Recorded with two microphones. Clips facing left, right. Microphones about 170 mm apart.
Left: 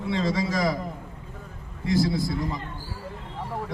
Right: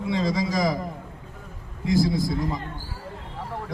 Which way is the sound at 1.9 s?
15° right (ahead or behind).